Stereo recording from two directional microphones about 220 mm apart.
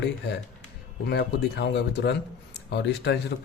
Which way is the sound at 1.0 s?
50° left (ahead or behind).